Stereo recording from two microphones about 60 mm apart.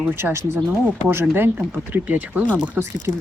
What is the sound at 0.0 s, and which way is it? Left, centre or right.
Speech, right.